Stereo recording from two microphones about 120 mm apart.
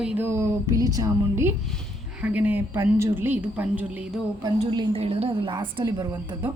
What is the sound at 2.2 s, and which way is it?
A woman's voice, 15° right (ahead or behind).